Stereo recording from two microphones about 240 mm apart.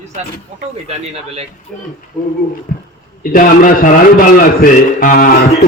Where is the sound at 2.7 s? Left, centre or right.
Left.